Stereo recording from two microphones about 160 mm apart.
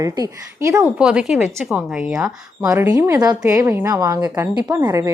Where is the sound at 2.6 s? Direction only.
15° right (ahead or behind).